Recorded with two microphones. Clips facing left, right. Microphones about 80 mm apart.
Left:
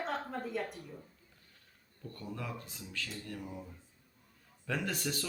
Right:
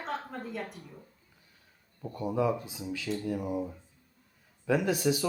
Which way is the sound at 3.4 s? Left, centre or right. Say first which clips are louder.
Right 12 dB; right.